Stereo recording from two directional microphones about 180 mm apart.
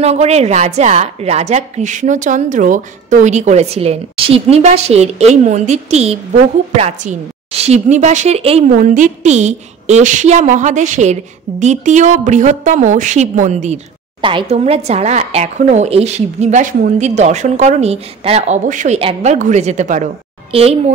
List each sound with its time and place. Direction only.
0.0 s a woman's voice: 35° right (ahead or behind)
8.7 s a woman's voice: 45° right (ahead or behind)
18.9 s a woman's voice: 30° right (ahead or behind)
19.3 s a woman's voice: 40° right (ahead or behind)